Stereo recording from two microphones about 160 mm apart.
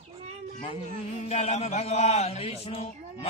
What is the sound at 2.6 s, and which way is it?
Speech, 40° left (ahead or behind).